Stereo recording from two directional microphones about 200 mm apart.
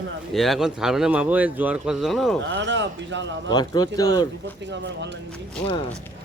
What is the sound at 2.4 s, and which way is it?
Speech, 65° right (ahead or behind).